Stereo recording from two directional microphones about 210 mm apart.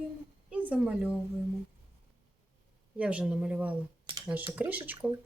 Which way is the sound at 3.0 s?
5° right (ahead or behind).